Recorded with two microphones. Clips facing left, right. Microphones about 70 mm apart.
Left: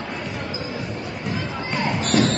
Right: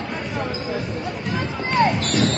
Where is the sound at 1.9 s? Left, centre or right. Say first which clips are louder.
Left 1 dB; centre.